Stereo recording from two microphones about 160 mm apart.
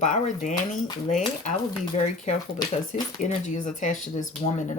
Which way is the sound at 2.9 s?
45° left (ahead or behind).